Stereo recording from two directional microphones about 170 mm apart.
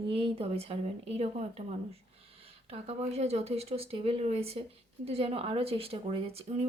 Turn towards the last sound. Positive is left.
turn(degrees=-35)  # may be behind; listen again after turning